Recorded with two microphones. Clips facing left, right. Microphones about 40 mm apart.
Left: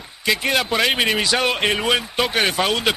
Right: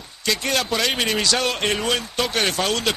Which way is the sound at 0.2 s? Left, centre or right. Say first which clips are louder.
Left 3 dB; centre.